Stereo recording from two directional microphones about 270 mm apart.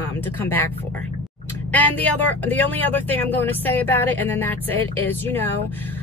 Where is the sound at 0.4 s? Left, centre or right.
Centre.